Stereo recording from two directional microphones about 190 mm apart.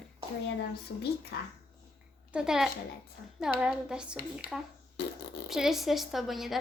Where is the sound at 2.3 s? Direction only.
5° right (ahead or behind).